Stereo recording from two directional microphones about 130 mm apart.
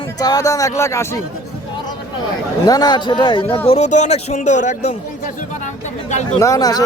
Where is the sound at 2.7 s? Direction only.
30° left (ahead or behind); by 5.3 s 70° left (ahead or behind).